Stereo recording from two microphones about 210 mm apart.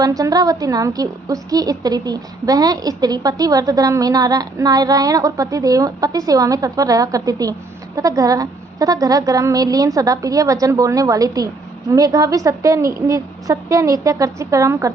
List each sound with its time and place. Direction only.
0.0 s a woman's voice: 15° right (ahead or behind)